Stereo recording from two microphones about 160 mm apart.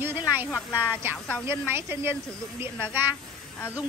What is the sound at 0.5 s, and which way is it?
Speech, 15° left (ahead or behind).